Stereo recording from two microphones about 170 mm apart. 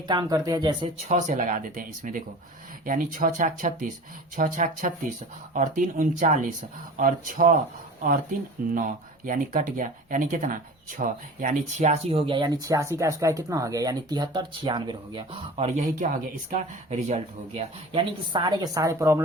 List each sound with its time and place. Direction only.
0.1 s speech: 25° right (ahead or behind)
0.9 s speech: 45° right (ahead or behind)
8.7 s speech: 50° right (ahead or behind); by 15.9 s 35° right (ahead or behind)
16.0 s speech: 55° right (ahead or behind); by 19.2 s 15° right (ahead or behind)